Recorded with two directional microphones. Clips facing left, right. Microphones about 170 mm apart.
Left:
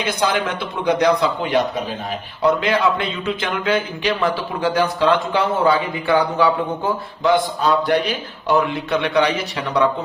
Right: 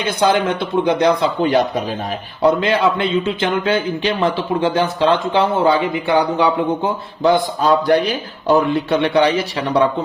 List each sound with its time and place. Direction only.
0.0 s speech: 30° right (ahead or behind)
1.5 s speech: 40° right (ahead or behind); by 6.5 s 20° right (ahead or behind)
7.6 s speech: 35° right (ahead or behind)